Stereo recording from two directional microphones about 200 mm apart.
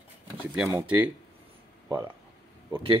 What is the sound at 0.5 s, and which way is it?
Speech, 10° right (ahead or behind).